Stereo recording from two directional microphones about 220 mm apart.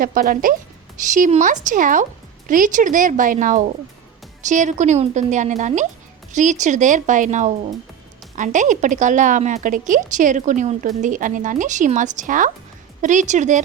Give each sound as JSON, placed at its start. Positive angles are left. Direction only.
{"t": 0.0, "sound": "a woman's voice", "side_deg": -40}